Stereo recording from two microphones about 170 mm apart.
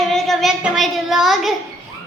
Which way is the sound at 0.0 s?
Centre (ahead or behind).